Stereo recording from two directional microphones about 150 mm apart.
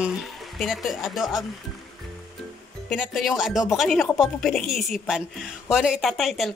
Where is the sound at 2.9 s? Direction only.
Centre (ahead or behind).